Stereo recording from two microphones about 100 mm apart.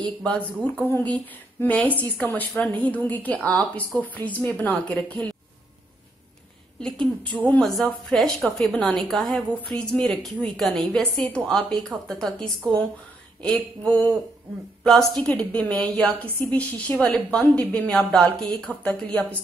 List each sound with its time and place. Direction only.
0.2 s a woman's voice: 10° left (ahead or behind)
6.8 s a woman's voice: 10° left (ahead or behind)
7.6 s a woman's voice: centre (ahead or behind)